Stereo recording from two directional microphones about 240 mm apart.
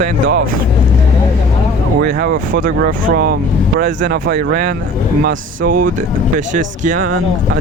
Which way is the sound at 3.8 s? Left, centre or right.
Right.